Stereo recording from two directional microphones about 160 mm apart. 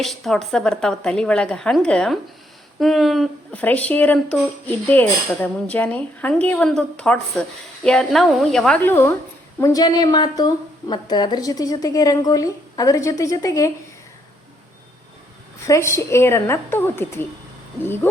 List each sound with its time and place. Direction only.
0.0 s a woman's voice: centre (ahead or behind); by 13.7 s 20° left (ahead or behind)
15.6 s speech: 20° left (ahead or behind)